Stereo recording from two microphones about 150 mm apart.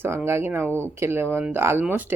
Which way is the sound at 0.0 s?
15° right (ahead or behind).